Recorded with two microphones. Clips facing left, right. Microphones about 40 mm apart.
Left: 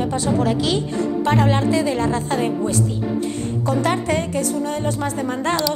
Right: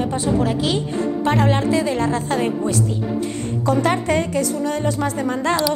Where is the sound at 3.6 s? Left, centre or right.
Right.